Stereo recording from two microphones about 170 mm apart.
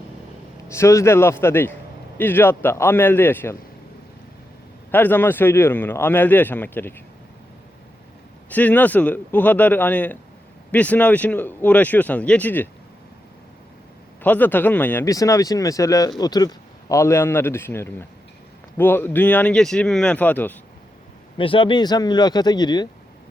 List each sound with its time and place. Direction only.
0.7 s speech: 15° left (ahead or behind)
4.9 s speech: 10° left (ahead or behind)
8.4 s speech: 10° left (ahead or behind)
14.2 s speech: 10° left (ahead or behind)
21.3 s speech: 30° left (ahead or behind)